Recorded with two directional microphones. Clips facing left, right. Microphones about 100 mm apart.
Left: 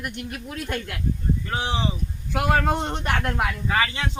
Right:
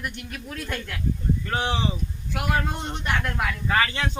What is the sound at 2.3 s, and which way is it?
A man's voice, 30° left (ahead or behind).